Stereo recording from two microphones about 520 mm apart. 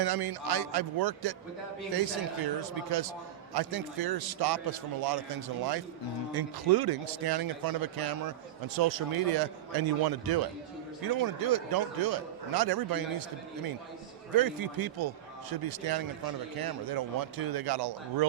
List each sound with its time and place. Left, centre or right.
0.0 s a man's voice: right
2.6 s a man's voice: right
14.3 s speech: right